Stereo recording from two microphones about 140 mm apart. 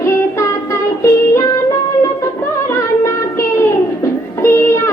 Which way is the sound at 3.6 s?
20° left (ahead or behind).